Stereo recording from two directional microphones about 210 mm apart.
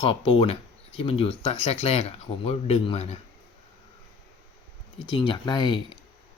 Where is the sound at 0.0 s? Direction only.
25° left (ahead or behind).